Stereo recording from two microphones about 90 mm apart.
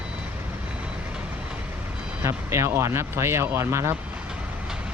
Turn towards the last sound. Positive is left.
turn(degrees=-30)  # may be behind; listen again after turning